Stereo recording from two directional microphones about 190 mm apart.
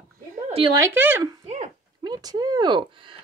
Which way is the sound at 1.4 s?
35° right (ahead or behind).